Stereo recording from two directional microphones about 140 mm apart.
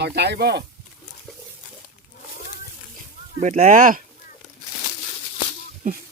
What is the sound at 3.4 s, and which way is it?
Speech, 65° right (ahead or behind).